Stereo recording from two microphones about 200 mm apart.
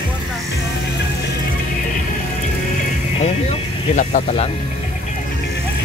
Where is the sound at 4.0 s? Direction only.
40° left (ahead or behind).